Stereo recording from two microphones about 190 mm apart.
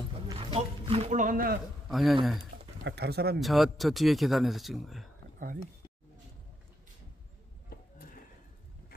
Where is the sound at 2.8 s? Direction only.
60° right (ahead or behind).